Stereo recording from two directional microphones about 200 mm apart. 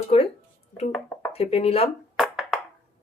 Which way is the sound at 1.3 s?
30° left (ahead or behind).